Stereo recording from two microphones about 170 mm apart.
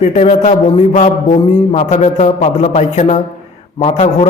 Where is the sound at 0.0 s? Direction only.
40° left (ahead or behind).